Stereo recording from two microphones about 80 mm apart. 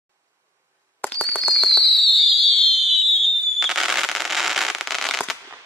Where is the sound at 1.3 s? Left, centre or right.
Centre.